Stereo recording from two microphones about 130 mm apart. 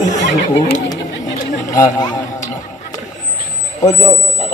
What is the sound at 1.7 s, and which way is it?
Speech, 30° left (ahead or behind).